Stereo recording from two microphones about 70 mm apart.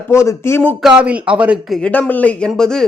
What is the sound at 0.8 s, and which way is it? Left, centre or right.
Speech, centre.